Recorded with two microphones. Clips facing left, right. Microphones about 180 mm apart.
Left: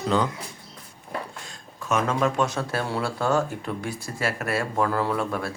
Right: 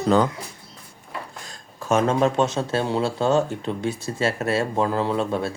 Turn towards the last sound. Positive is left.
turn(degrees=-25)  # may be behind; listen again after turning